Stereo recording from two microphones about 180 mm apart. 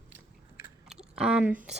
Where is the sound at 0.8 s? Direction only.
5° right (ahead or behind).